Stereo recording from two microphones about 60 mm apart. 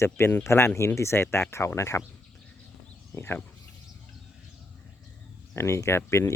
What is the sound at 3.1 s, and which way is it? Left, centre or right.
Speech, left.